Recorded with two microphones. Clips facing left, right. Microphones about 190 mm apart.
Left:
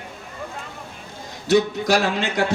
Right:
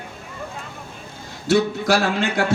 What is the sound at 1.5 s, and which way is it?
Speech, 20° left (ahead or behind).